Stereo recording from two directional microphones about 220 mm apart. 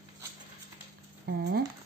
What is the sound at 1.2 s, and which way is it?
Speech, 50° right (ahead or behind).